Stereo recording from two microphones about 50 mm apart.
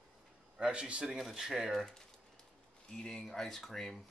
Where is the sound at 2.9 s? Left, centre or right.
Centre.